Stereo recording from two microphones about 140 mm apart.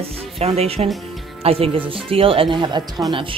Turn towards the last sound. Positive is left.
turn(degrees=-30)  # may be behind; listen again after turning